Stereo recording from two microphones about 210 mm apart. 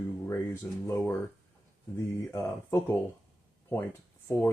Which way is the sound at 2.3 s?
10° left (ahead or behind).